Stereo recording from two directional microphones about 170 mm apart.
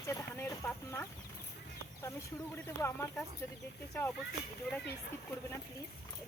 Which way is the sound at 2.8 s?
15° left (ahead or behind).